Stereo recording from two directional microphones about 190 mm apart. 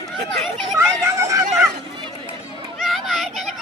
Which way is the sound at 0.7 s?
15° right (ahead or behind).